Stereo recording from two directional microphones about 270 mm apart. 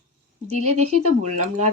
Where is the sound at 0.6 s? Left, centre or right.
Right.